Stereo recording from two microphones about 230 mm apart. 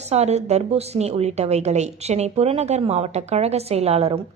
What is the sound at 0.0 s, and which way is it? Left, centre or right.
A woman's voice, right.